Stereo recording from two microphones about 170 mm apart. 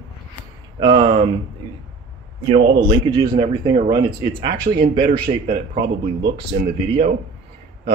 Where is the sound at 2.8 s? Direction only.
30° right (ahead or behind).